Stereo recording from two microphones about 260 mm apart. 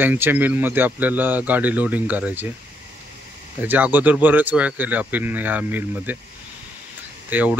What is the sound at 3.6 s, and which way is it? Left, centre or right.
A man's voice, centre.